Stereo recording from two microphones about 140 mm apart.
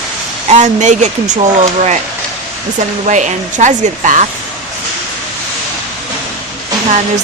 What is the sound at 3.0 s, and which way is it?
Speech, 60° right (ahead or behind).